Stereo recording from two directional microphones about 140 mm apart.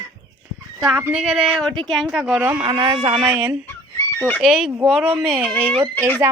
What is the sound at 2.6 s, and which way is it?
Speech, 35° right (ahead or behind).